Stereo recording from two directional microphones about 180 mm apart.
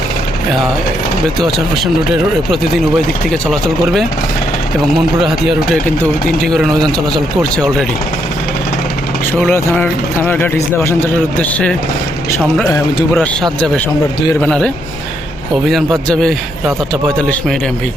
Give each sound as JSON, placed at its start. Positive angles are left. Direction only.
{"t": 1.4, "sound": "speech", "side_deg": 0}
{"t": 3.2, "sound": "speech", "side_deg": 0}
{"t": 5.2, "sound": "speech", "side_deg": 0}
{"t": 9.5, "sound": "speech", "side_deg": 10}
{"t": 14.4, "sound": "speech", "side_deg": 5}